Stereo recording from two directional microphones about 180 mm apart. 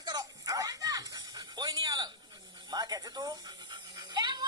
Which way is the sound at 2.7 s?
20° right (ahead or behind).